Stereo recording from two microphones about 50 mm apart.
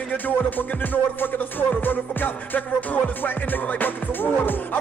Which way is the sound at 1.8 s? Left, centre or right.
Left.